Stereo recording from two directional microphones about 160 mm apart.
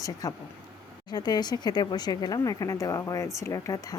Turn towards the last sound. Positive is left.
turn(degrees=20)  # may be behind; listen again after turning